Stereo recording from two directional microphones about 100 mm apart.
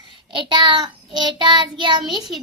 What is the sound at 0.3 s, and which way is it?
Child singing, 55° right (ahead or behind).